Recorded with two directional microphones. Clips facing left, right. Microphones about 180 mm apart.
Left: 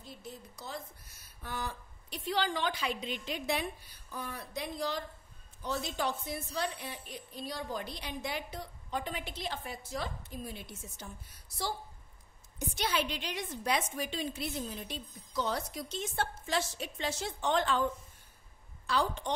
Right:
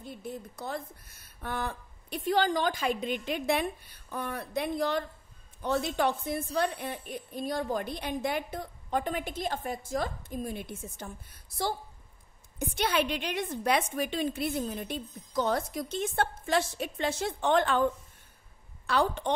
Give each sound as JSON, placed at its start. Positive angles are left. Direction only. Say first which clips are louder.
{"t": 0.0, "sound": "a woman's voice", "louder": "right 7 dB", "side_deg": -55}
{"t": 12.5, "sound": "a woman's voice", "louder": "right 5 dB", "side_deg": -60}
{"t": 18.9, "sound": "a woman's voice", "louder": "right 4 dB", "side_deg": -60}